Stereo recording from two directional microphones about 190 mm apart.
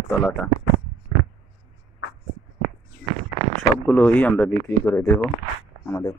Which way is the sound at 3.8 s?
5° left (ahead or behind).